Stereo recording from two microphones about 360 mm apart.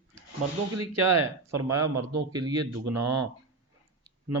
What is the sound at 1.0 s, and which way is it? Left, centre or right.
Speech, right.